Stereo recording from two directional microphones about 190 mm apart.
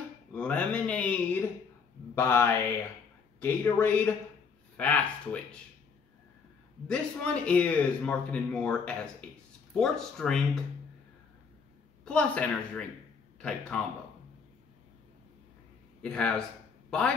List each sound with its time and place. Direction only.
0.3 s speech: 5° left (ahead or behind)
6.9 s a man's voice: 5° left (ahead or behind)
12.0 s a man's voice: 5° left (ahead or behind)
16.0 s a man's voice: 5° left (ahead or behind)